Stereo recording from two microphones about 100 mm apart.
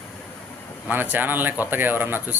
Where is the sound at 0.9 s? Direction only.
20° right (ahead or behind).